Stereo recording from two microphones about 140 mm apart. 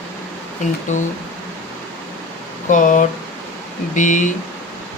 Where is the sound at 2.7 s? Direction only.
65° left (ahead or behind).